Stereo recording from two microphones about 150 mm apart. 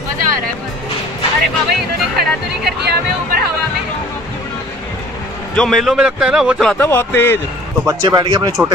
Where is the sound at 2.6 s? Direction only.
90° right.